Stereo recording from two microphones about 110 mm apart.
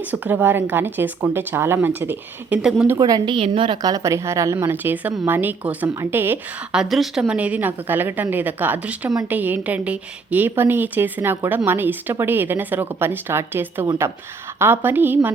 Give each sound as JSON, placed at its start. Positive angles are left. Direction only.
{"t": 0.1, "sound": "a woman's voice", "side_deg": -15}
{"t": 3.0, "sound": "a woman's voice", "side_deg": -40}
{"t": 3.4, "sound": "a woman's voice", "side_deg": -55}
{"t": 3.8, "sound": "a woman's voice", "side_deg": -35}
{"t": 6.7, "sound": "a woman's voice", "side_deg": 0}